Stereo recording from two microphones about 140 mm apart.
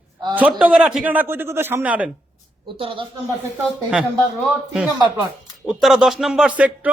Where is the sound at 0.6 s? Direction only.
5° right (ahead or behind).